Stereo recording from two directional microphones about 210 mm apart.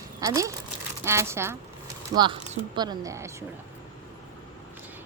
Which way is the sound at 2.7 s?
15° right (ahead or behind).